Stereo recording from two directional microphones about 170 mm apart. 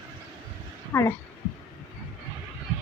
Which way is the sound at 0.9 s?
15° left (ahead or behind).